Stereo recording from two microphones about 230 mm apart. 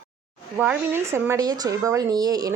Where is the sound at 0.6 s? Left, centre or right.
Centre.